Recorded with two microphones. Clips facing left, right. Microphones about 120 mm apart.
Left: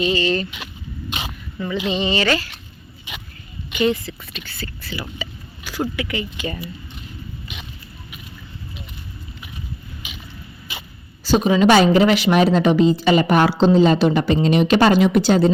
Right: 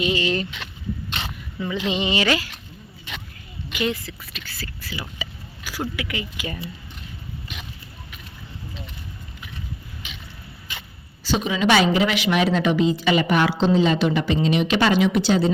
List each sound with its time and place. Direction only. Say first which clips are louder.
0.0 s speech: left 3 dB; 15° right (ahead or behind)
1.2 s a sound: left 2 dB; 15° left (ahead or behind)
1.5 s speech: left 2 dB; 10° right (ahead or behind)
3.7 s speech: left 6 dB; centre (ahead or behind)
4.9 s a sound: left 4 dB; 10° right (ahead or behind)
6.0 s speech: left 4 dB; 5° right (ahead or behind)
7.5 s a sound: right 1 dB; centre (ahead or behind)
10.0 s vehicle: left 2 dB; 10° left (ahead or behind)
11.2 s a woman's voice: left 7 dB; 40° left (ahead or behind)